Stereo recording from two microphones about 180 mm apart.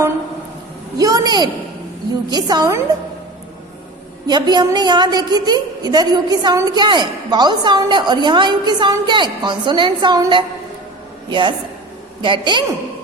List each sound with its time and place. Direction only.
0.9 s a sound: 20° right (ahead or behind)
2.3 s a woman's voice: 20° right (ahead or behind)
4.3 s a woman's voice: 25° right (ahead or behind)